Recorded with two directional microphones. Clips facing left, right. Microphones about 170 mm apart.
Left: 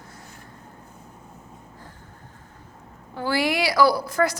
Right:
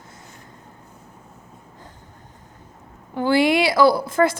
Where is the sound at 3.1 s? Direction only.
25° right (ahead or behind).